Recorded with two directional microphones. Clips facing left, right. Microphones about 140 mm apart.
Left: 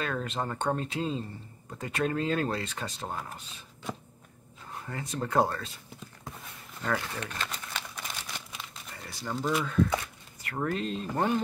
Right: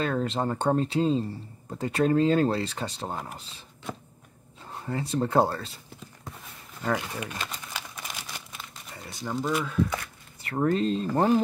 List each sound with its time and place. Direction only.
0.0 s speech: 30° right (ahead or behind)
4.7 s speech: 30° right (ahead or behind)
6.8 s speech: 15° right (ahead or behind)
7.9 s a sound: 5° right (ahead or behind)
9.2 s speech: 5° right (ahead or behind)
10.4 s speech: 30° right (ahead or behind)